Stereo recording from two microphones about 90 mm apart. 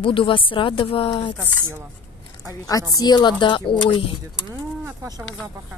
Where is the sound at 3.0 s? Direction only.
55° left (ahead or behind); by 4.0 s 80° left.